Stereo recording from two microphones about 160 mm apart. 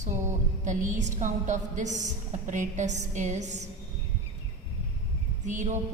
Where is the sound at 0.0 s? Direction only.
50° right (ahead or behind).